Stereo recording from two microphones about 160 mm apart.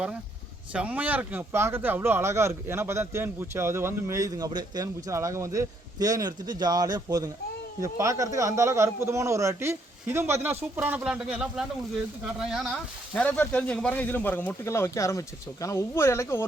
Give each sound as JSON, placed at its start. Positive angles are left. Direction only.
{"t": 0.7, "sound": "speech", "side_deg": -10}
{"t": 13.2, "sound": "speech", "side_deg": 10}